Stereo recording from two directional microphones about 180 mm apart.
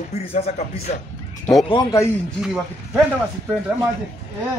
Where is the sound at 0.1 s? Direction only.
35° left (ahead or behind).